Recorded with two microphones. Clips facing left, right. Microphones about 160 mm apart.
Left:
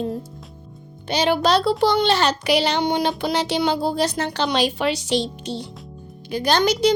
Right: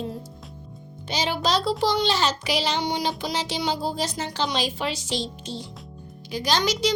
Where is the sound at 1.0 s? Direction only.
60° left (ahead or behind).